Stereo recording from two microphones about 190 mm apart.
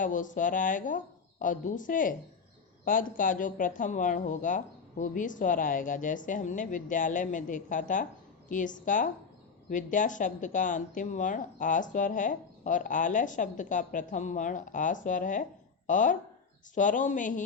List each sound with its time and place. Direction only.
0.0 s a woman's voice: 45° left (ahead or behind)